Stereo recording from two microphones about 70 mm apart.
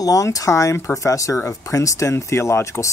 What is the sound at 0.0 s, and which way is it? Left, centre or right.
Speech, left.